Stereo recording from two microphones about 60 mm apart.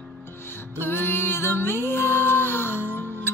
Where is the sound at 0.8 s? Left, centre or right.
Left.